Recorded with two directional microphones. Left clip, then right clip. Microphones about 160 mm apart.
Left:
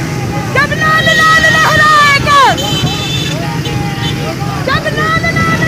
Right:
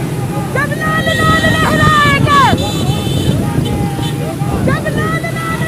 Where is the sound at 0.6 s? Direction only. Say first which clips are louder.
Left 6 dB; 20° left (ahead or behind).